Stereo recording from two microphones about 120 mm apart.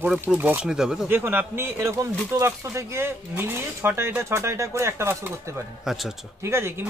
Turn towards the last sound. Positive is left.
turn(degrees=-20)  # may be behind; listen again after turning